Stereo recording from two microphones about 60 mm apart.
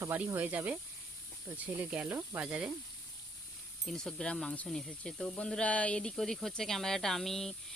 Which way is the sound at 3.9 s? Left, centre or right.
Centre.